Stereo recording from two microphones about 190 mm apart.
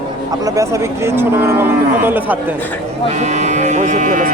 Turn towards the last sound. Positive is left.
turn(degrees=-45)  # may be behind; listen again after turning